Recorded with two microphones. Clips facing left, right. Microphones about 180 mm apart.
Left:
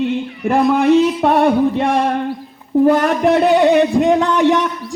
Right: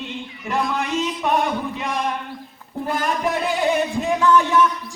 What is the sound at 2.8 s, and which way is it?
Speech, 70° left (ahead or behind).